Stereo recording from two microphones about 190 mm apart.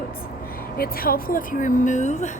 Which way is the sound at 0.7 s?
50° left (ahead or behind).